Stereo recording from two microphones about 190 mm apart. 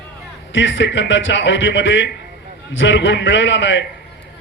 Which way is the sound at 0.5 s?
75° left (ahead or behind).